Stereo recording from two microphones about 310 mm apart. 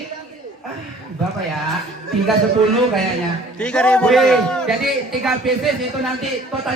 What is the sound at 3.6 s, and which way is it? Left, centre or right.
A man's voice, centre.